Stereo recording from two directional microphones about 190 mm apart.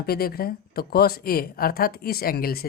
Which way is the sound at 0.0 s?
55° left (ahead or behind).